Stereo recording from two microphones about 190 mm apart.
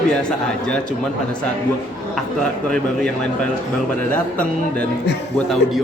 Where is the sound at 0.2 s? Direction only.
5° left (ahead or behind).